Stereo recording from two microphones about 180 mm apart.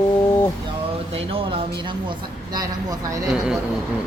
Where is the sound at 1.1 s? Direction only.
30° right (ahead or behind).